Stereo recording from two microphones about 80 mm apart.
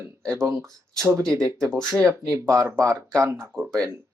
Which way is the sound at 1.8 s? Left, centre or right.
Right.